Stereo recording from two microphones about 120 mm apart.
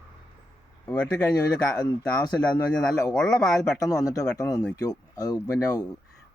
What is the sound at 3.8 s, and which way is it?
Speech, 30° left (ahead or behind).